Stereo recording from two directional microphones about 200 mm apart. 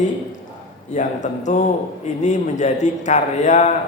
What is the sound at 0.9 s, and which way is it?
A man's voice, 40° left (ahead or behind).